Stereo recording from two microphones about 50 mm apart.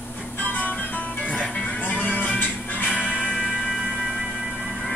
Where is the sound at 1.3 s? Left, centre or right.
Centre.